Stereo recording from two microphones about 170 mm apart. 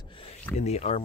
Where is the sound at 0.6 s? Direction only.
40° left (ahead or behind).